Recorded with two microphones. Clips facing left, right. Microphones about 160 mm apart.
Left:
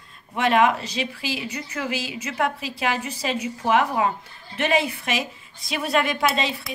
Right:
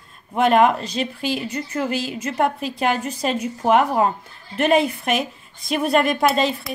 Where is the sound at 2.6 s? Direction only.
5° left (ahead or behind).